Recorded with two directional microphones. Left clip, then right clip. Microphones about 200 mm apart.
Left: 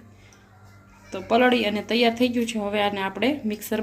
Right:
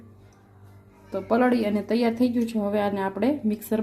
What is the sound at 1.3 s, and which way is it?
A woman's voice, 35° right (ahead or behind).